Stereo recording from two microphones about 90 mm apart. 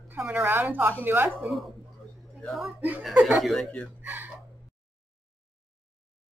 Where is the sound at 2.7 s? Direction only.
15° right (ahead or behind).